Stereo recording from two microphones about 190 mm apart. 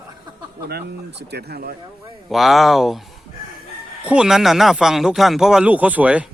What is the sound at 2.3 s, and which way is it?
Speech, centre (ahead or behind).